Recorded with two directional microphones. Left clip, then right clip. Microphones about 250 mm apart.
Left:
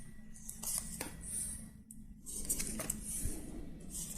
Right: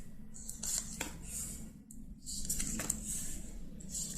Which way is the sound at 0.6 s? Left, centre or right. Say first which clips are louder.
Right 4 dB; centre.